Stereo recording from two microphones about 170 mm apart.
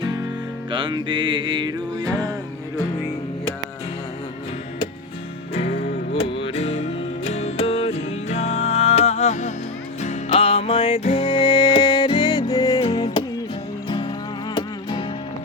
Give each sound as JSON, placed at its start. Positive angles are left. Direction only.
{"t": 0.7, "sound": "music", "side_deg": -30}
{"t": 5.5, "sound": "music", "side_deg": 35}